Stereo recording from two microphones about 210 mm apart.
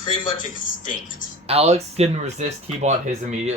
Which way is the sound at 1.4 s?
30° right (ahead or behind).